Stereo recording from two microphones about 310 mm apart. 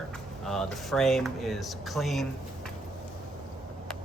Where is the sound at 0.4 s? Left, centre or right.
Centre.